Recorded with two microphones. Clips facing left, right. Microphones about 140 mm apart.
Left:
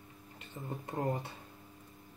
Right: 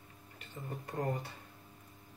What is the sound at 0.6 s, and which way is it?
Speech, 20° left (ahead or behind).